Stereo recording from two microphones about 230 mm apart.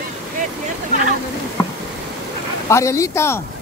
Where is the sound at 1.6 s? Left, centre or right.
Centre.